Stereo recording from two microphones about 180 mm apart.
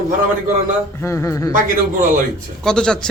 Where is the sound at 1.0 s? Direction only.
15° left (ahead or behind).